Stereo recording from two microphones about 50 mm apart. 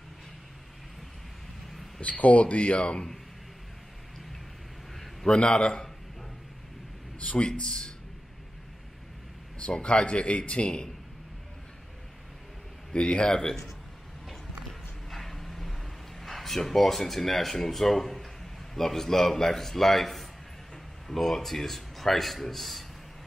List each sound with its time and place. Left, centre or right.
2.0 s a man's voice: left
4.9 s a man's voice: centre
7.2 s a man's voice: left
7.4 s a man's voice: centre
9.6 s a man's voice: left
12.9 s a man's voice: left
14.7 s a sound: centre
16.2 s speech: centre